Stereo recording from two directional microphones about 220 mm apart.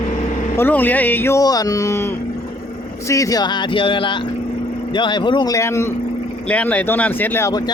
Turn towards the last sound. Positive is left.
turn(degrees=10)  # may be behind; listen again after turning